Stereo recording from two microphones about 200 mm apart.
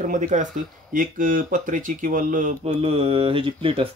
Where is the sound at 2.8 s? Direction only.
25° right (ahead or behind).